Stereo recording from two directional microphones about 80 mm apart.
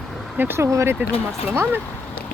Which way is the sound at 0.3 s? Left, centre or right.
Right.